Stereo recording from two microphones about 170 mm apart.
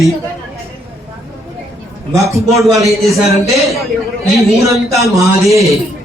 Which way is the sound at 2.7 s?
20° right (ahead or behind).